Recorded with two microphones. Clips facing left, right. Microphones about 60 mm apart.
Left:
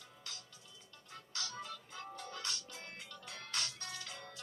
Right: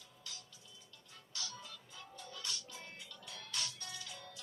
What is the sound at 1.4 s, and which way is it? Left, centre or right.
Music, left.